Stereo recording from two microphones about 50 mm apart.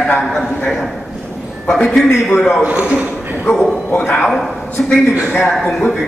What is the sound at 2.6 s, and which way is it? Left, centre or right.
Speech, right.